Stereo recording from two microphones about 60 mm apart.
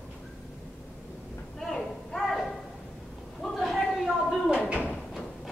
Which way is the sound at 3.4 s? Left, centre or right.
Centre.